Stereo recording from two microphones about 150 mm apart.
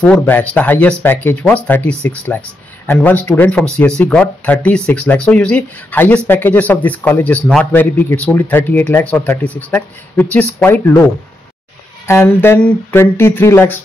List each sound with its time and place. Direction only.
0.2 s speech: 10° left (ahead or behind)
12.1 s speech: 15° left (ahead or behind)